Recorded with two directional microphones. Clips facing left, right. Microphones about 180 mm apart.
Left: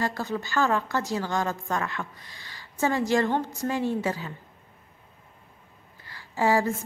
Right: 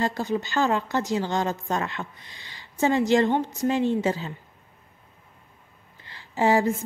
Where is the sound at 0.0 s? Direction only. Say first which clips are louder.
Right 3 dB; 20° right (ahead or behind).